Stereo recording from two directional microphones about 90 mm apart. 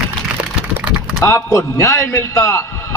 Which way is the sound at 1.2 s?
35° left (ahead or behind).